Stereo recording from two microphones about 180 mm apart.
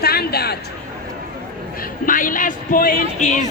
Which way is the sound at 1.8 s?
50° left (ahead or behind).